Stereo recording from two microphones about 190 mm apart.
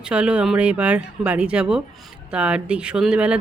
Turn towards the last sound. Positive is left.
turn(degrees=-5)  # may be behind; listen again after turning